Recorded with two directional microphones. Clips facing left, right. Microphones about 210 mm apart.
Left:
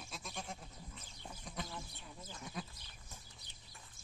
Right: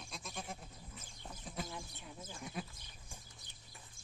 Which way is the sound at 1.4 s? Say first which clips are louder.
Right 2 dB; 5° right (ahead or behind).